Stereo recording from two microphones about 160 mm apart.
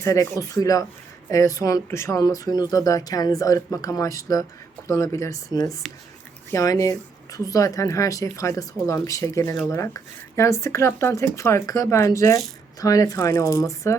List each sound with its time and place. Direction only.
0.0 s speech: 20° left (ahead or behind)
6.5 s speech: 20° left (ahead or behind)